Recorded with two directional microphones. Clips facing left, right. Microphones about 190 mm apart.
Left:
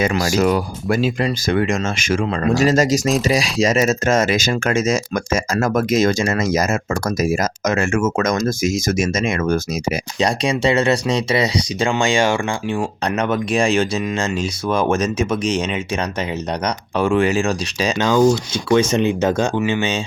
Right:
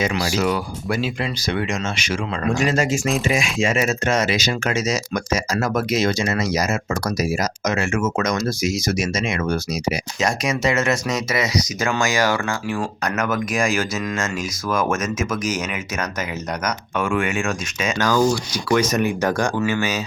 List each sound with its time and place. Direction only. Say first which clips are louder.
0.0 s speech: left 4 dB; 45° left (ahead or behind)
10.2 s speech: left 6 dB; 30° left (ahead or behind)
17.9 s speech: left 4 dB; 20° left (ahead or behind)